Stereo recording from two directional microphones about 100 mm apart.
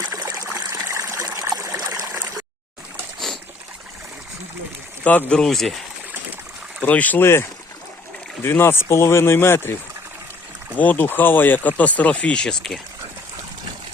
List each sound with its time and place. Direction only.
0.1 s trickle: 35° right (ahead or behind)
1.8 s a sound: 35° right (ahead or behind)
5.0 s speech: 10° left (ahead or behind)
6.8 s speech: 15° left (ahead or behind)
8.4 s speech: 20° left (ahead or behind)
10.8 s speech: 15° left (ahead or behind)